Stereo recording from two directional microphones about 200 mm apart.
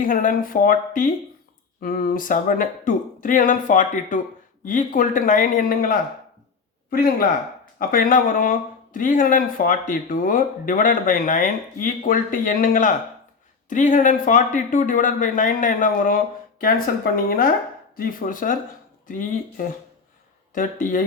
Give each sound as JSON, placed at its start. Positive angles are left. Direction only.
{"t": 0.0, "sound": "speech", "side_deg": 45}